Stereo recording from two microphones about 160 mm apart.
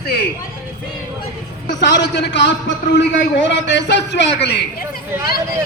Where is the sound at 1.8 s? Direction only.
90° left.